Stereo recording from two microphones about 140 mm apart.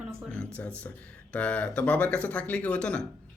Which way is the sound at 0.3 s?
10° left (ahead or behind).